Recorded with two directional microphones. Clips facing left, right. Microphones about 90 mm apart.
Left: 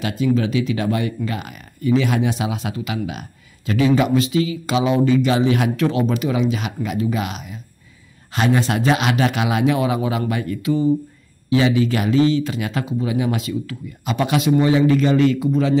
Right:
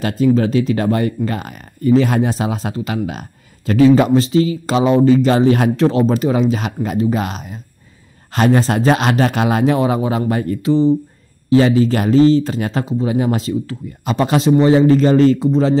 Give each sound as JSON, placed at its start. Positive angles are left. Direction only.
{"t": 0.0, "sound": "speech", "side_deg": -40}